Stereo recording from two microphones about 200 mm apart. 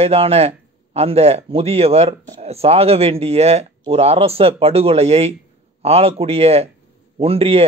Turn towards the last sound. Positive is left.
turn(degrees=-30)  # may be behind; listen again after turning